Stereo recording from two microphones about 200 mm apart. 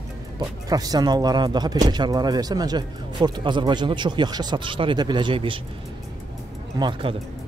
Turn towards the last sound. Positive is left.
turn(degrees=-25)  # may be behind; listen again after turning